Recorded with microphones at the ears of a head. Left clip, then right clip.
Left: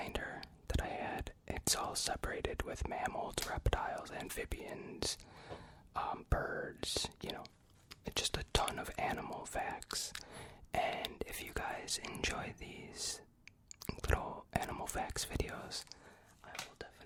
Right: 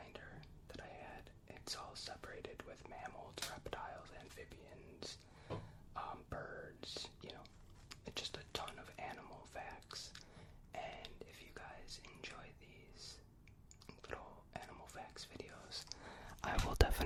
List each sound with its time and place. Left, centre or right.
0.0 s speech: left
13.8 s whispering: left
16.4 s whispering: right